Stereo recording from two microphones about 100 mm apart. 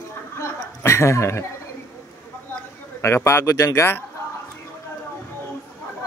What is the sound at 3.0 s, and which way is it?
A man's voice, 25° left (ahead or behind).